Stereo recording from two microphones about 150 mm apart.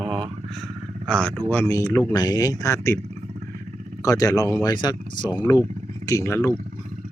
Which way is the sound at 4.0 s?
20° left (ahead or behind).